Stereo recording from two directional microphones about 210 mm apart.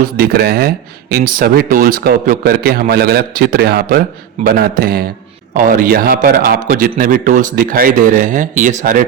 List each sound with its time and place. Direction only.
0.0 s a man's voice: 45° right (ahead or behind)